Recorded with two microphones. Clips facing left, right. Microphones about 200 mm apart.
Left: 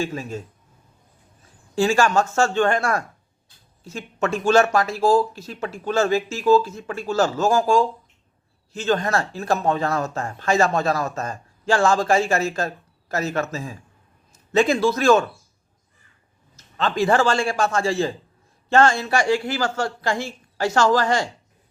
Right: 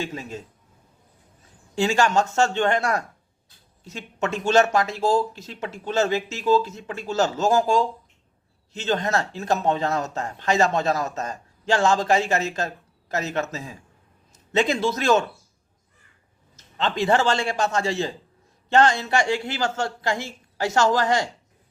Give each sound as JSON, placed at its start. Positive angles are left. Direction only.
{"t": 0.0, "sound": "speech", "side_deg": -20}
{"t": 1.7, "sound": "a man's voice", "side_deg": -20}
{"t": 16.6, "sound": "speech", "side_deg": -20}